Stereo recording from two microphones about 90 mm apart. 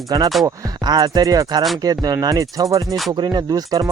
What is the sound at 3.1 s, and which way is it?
Speech, 50° right (ahead or behind).